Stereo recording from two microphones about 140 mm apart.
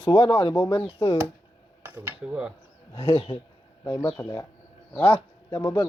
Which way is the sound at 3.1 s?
40° left (ahead or behind).